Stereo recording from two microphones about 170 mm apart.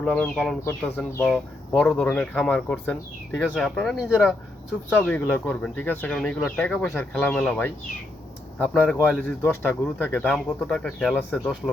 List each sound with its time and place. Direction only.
0.0 s speech: 5° left (ahead or behind)